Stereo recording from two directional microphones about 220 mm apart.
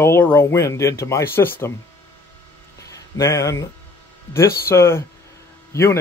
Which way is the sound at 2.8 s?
15° left (ahead or behind).